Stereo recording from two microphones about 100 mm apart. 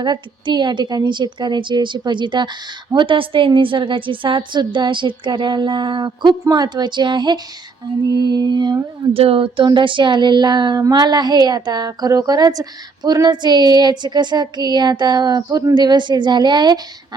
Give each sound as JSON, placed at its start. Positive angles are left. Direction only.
{"t": 0.0, "sound": "a woman's voice", "side_deg": -45}
{"t": 9.1, "sound": "a woman's voice", "side_deg": -65}